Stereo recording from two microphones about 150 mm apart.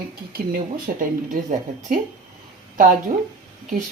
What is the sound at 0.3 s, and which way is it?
Speech, 70° right (ahead or behind).